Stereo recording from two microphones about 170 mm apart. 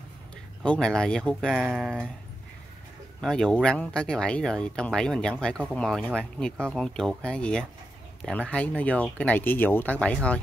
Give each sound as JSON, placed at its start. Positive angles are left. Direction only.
{"t": 0.6, "sound": "speech", "side_deg": 5}
{"t": 3.2, "sound": "speech", "side_deg": 5}